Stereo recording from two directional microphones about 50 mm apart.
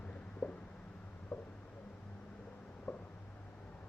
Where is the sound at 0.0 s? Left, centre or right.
Left.